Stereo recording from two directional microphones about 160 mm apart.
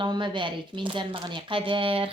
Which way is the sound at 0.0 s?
30° right (ahead or behind).